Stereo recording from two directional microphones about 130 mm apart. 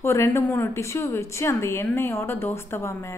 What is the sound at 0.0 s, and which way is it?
Speech, 20° left (ahead or behind).